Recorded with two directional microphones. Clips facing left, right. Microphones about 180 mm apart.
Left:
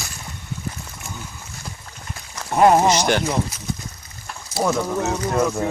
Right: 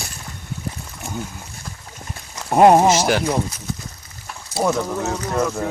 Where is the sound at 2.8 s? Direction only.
5° right (ahead or behind).